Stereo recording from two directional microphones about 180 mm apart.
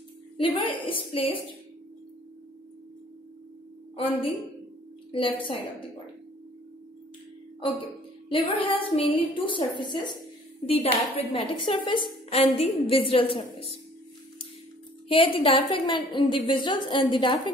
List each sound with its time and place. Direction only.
0.4 s a woman's voice: 30° left (ahead or behind)
3.9 s a woman's voice: 30° left (ahead or behind)
7.6 s a woman's voice: 30° left (ahead or behind)
11.1 s a woman's voice: 30° left (ahead or behind)
15.0 s a woman's voice: 30° left (ahead or behind)